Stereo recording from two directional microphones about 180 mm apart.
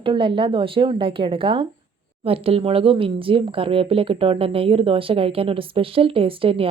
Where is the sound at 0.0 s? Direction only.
30° right (ahead or behind).